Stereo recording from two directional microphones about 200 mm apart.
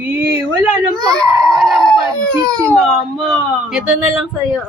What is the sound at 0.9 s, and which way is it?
Speech, 20° right (ahead or behind).